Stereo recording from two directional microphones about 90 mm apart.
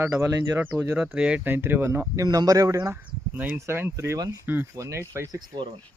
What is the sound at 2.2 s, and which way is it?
Speech, 45° right (ahead or behind).